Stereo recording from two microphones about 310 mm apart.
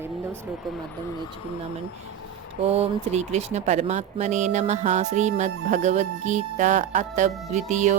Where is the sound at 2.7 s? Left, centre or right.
Right.